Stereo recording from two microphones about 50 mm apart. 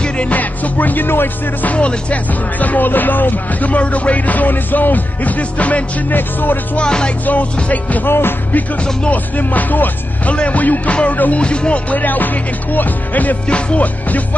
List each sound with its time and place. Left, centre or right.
0.0 s music: left
1.7 s speech: left
2.6 s music: left
6.8 s speech: centre
7.2 s music: left
8.1 s music: left
9.1 s music: left
10.3 s speech: left
11.0 s music: left
11.4 s music: left
13.5 s speech: left